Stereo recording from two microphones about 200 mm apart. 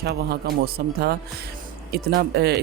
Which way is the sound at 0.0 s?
50° right (ahead or behind).